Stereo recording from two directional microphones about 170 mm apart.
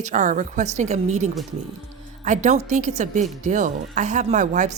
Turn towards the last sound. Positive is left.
turn(degrees=-45)  # may be behind; listen again after turning